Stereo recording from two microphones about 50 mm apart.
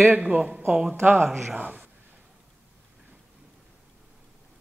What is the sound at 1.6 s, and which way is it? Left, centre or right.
Speech, right.